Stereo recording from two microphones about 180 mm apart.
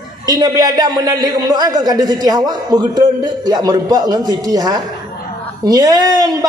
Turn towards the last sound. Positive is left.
turn(degrees=-20)  # may be behind; listen again after turning